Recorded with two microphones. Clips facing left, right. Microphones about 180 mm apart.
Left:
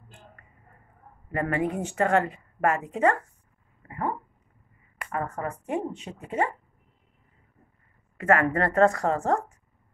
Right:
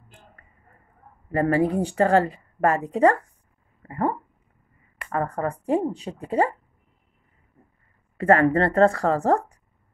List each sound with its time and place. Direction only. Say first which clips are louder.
1.3 s a woman's voice: right 6 dB; 35° right (ahead or behind)
5.1 s a woman's voice: right 5 dB; 35° right (ahead or behind)
8.2 s a woman's voice: right 5 dB; 30° right (ahead or behind)